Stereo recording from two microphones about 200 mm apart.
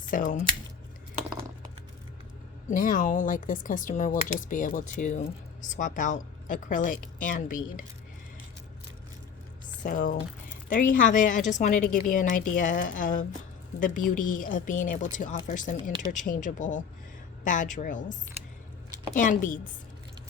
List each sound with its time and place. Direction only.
0.0 s speech: 40° left (ahead or behind)
2.6 s a woman's voice: 40° left (ahead or behind)
9.8 s a woman's voice: 45° left (ahead or behind)